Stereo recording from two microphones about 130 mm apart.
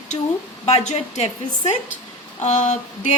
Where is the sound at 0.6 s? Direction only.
55° left (ahead or behind).